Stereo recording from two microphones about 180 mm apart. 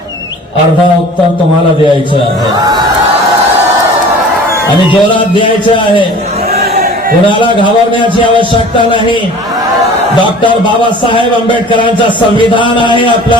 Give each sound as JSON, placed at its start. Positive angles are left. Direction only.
{"t": 4.9, "sound": "a man's voice", "side_deg": 25}
{"t": 6.5, "sound": "a sound", "side_deg": -55}
{"t": 7.3, "sound": "a man's voice", "side_deg": 25}
{"t": 10.2, "sound": "a man's voice", "side_deg": 25}